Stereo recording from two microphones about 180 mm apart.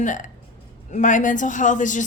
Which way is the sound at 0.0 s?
45° left (ahead or behind).